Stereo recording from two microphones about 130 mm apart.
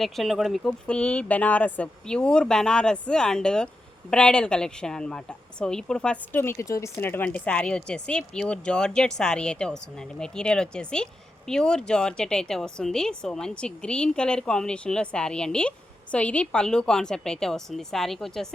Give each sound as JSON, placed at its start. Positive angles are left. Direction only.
{"t": 0.0, "sound": "speech", "side_deg": 0}
{"t": 6.3, "sound": "speech", "side_deg": 20}